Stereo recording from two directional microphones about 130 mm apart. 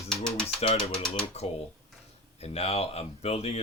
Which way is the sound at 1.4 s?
55° left (ahead or behind).